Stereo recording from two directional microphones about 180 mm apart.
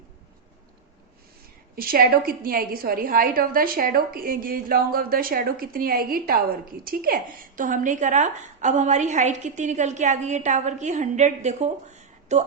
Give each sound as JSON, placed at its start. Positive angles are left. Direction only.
{"t": 1.7, "sound": "a woman's voice", "side_deg": -55}